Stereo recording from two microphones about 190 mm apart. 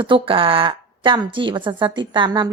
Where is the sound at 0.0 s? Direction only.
25° right (ahead or behind).